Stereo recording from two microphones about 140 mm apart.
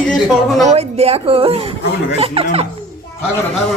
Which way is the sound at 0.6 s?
50° right (ahead or behind).